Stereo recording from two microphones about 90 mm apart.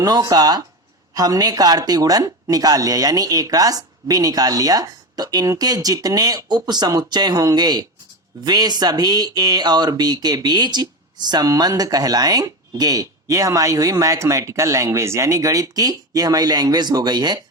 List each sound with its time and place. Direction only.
0.0 s speech: 45° right (ahead or behind)